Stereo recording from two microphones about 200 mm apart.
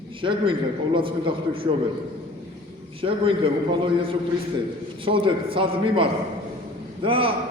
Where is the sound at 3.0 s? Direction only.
25° right (ahead or behind).